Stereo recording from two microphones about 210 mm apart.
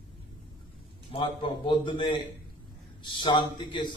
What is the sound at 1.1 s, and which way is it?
A man's voice, 25° left (ahead or behind).